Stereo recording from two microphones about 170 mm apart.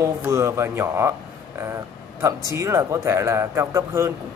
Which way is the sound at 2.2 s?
15° right (ahead or behind).